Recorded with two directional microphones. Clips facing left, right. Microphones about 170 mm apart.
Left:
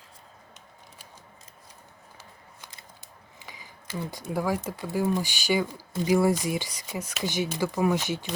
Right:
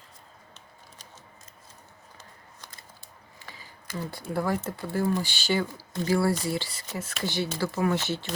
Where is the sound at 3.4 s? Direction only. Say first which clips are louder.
Left 1 dB; 15° left (ahead or behind).